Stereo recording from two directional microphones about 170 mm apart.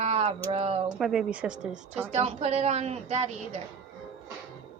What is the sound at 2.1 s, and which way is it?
A woman's voice, 40° right (ahead or behind).